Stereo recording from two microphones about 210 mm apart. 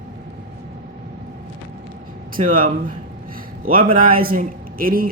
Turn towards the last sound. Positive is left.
turn(degrees=-45)  # may be behind; listen again after turning